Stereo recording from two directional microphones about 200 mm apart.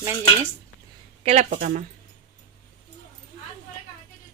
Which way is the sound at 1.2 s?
30° right (ahead or behind).